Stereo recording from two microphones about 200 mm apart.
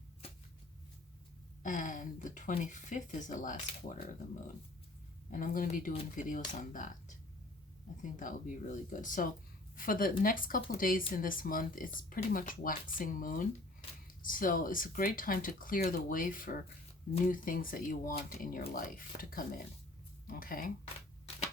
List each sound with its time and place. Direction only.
1.6 s speech: 40° left (ahead or behind)
5.3 s speech: 40° left (ahead or behind)
5.9 s speech: 30° left (ahead or behind)
6.2 s speech: 40° left (ahead or behind)
8.1 s speech: 40° left (ahead or behind)